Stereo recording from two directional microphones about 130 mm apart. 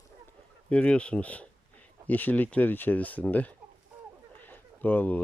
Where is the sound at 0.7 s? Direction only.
10° left (ahead or behind).